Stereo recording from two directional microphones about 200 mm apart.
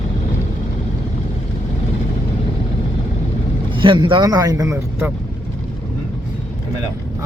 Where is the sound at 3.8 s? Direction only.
25° right (ahead or behind).